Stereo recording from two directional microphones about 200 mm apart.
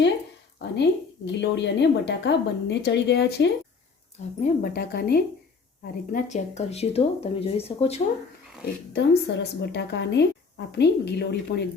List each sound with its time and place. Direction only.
0.6 s a woman's voice: 60° left (ahead or behind)
6.1 s speech: 40° left (ahead or behind)
8.9 s a woman's voice: 55° left (ahead or behind)